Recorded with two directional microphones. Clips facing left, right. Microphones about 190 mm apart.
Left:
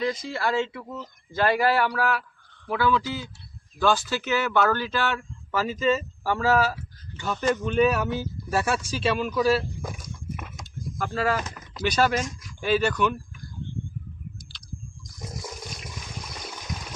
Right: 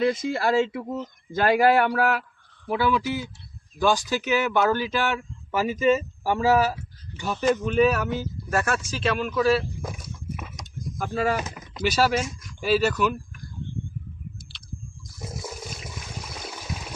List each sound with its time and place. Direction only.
0.1 s speech: 45° right (ahead or behind)
1.5 s speech: 50° right (ahead or behind)
2.6 s speech: 15° right (ahead or behind)
15.0 s toilet flush: 5° right (ahead or behind)